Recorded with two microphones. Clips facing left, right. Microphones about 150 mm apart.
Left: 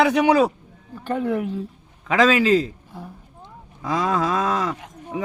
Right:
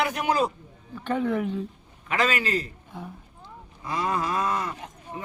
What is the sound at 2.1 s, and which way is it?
Speech, 90° left.